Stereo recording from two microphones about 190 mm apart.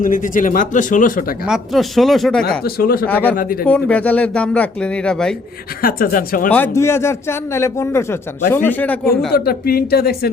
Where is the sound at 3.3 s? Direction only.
50° left (ahead or behind).